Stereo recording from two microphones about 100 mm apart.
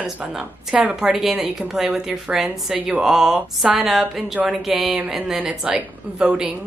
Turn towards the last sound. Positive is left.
turn(degrees=-10)  # may be behind; listen again after turning